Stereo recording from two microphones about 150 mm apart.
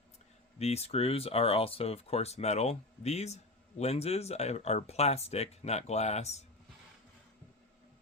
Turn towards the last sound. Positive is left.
turn(degrees=45)  # may be behind; listen again after turning